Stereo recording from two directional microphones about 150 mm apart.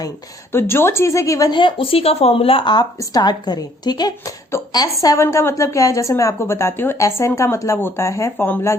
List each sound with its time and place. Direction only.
0.5 s a woman's voice: 15° left (ahead or behind)